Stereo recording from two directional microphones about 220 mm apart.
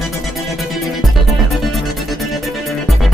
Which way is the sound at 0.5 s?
Centre (ahead or behind).